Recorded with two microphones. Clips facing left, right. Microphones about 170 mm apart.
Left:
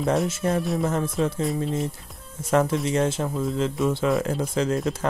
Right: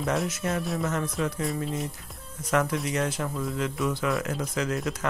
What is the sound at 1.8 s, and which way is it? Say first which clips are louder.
Speech: left 5 dB; centre (ahead or behind).